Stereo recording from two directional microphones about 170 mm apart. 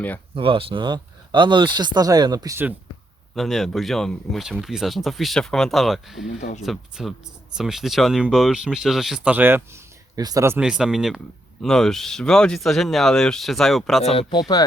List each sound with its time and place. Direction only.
0.3 s speech: 30° right (ahead or behind); by 2.7 s 15° right (ahead or behind)
3.3 s speech: centre (ahead or behind); by 10.6 s 15° right (ahead or behind)
10.6 s speech: 5° right (ahead or behind)
14.0 s speech: 35° left (ahead or behind)